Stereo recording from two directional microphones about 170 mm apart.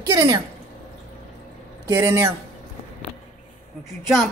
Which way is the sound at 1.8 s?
15° right (ahead or behind).